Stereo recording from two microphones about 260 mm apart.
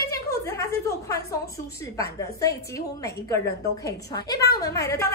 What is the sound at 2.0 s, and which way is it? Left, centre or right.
A woman's voice, centre.